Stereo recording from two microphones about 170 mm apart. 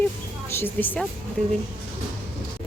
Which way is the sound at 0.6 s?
10° left (ahead or behind).